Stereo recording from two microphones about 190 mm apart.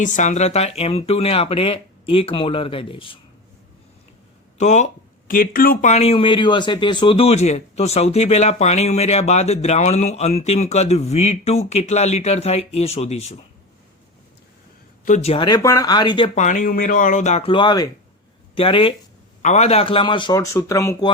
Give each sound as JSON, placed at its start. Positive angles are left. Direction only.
{"t": 0.0, "sound": "speech", "side_deg": 40}
{"t": 4.5, "sound": "speech", "side_deg": 40}
{"t": 5.3, "sound": "speech", "side_deg": 50}
{"t": 15.0, "sound": "a man's voice", "side_deg": 35}